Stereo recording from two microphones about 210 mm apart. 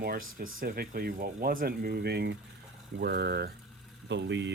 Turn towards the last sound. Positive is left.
turn(degrees=-55)  # may be behind; listen again after turning